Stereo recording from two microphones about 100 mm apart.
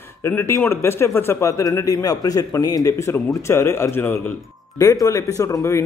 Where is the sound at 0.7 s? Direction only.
25° left (ahead or behind).